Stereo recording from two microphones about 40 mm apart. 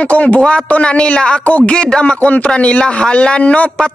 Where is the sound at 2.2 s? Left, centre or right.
Left.